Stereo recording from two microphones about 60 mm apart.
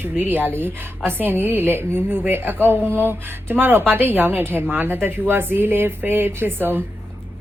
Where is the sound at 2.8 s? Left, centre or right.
Left.